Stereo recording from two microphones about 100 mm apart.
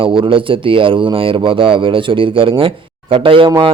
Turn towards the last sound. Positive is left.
turn(degrees=-65)  # may be behind; listen again after turning